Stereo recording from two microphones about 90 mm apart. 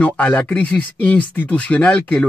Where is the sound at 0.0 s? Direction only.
15° left (ahead or behind).